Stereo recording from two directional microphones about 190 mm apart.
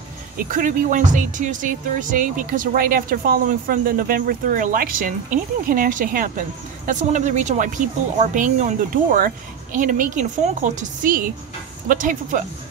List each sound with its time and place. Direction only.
0.4 s speech: 45° right (ahead or behind)